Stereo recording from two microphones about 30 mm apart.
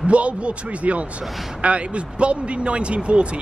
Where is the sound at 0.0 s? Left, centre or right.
Right.